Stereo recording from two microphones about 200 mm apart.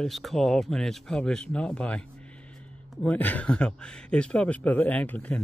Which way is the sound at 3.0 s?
10° left (ahead or behind).